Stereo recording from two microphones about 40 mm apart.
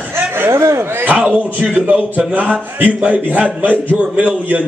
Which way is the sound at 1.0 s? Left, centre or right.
Right.